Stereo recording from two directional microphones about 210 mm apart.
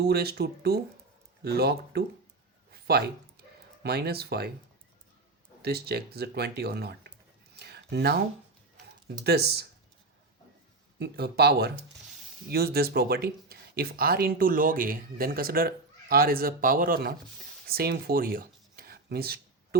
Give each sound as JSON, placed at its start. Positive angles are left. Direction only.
{"t": 0.0, "sound": "speech", "side_deg": -50}
{"t": 5.6, "sound": "speech", "side_deg": -50}
{"t": 7.6, "sound": "a sound", "side_deg": -50}
{"t": 9.0, "sound": "speech", "side_deg": -50}
{"t": 11.0, "sound": "speech", "side_deg": -50}